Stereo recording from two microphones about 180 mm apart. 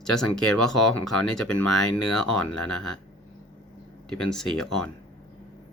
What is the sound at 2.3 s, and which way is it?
Speech, 5° left (ahead or behind).